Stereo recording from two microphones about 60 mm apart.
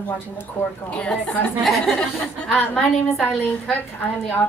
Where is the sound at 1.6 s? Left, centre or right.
Centre.